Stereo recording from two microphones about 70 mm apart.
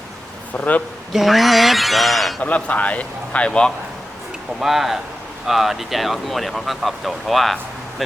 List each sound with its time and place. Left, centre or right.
0.5 s a man's voice: left
1.1 s speech: centre
2.4 s a man's voice: left
4.6 s speech: centre